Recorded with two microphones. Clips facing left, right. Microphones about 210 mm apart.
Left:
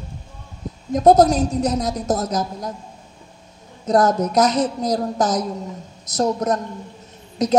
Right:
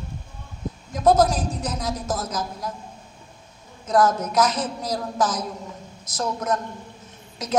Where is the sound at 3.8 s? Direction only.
35° left (ahead or behind).